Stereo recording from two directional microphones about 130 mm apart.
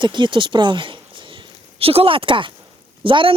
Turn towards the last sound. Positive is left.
turn(degrees=-40)  # may be behind; listen again after turning